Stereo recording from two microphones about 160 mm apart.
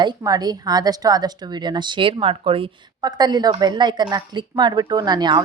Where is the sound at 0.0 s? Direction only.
25° right (ahead or behind).